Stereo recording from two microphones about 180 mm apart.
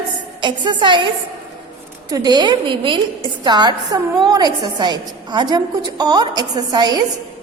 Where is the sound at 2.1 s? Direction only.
20° right (ahead or behind).